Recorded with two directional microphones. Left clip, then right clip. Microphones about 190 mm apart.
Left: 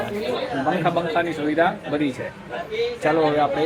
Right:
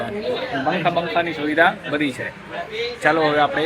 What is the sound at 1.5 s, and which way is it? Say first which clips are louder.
A man's voice: right 4 dB; 10° left (ahead or behind).